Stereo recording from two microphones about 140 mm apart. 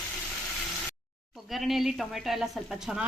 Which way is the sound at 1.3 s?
Centre (ahead or behind).